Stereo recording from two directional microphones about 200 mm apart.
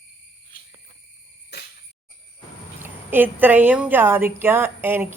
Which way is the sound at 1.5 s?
55° left (ahead or behind).